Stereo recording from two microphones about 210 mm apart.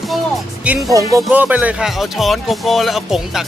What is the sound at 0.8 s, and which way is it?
Speech, 15° right (ahead or behind).